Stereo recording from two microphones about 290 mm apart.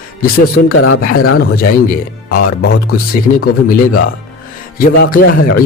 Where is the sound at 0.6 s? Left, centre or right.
Left.